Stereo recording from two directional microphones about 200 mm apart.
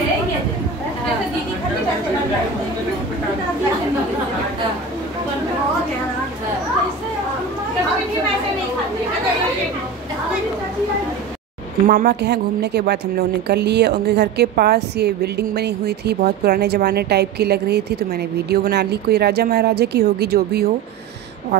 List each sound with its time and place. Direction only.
11.9 s a woman's voice: 50° right (ahead or behind)